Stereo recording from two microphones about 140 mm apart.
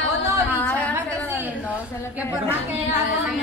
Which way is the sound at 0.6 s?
10° left (ahead or behind).